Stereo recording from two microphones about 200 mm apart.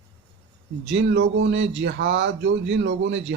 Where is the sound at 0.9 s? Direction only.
65° right (ahead or behind).